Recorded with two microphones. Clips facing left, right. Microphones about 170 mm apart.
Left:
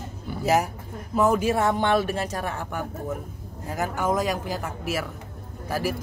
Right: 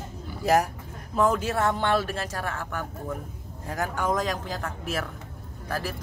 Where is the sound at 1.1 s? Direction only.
10° left (ahead or behind).